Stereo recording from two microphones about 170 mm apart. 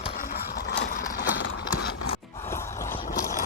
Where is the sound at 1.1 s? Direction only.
70° left (ahead or behind).